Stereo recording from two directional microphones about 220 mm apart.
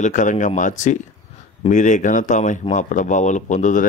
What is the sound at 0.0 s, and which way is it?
Speech, 35° left (ahead or behind).